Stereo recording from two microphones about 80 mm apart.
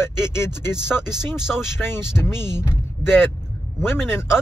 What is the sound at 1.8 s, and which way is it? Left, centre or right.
Speech, left.